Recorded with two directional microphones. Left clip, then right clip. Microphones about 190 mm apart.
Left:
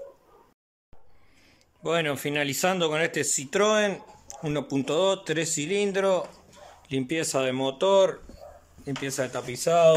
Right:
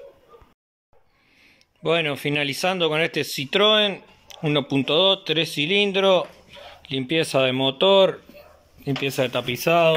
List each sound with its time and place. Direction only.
1.8 s speech: centre (ahead or behind)